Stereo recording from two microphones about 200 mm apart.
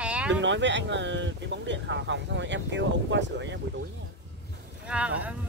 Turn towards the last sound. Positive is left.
turn(degrees=-5)  # may be behind; listen again after turning